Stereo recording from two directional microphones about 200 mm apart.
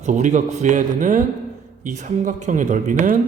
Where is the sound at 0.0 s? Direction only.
35° right (ahead or behind).